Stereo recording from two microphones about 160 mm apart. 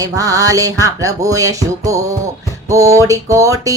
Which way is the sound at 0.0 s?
20° right (ahead or behind).